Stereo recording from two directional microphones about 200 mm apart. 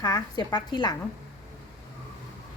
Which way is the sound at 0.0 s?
20° left (ahead or behind).